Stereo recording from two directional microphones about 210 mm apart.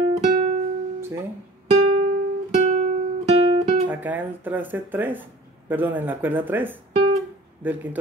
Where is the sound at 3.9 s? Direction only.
10° right (ahead or behind).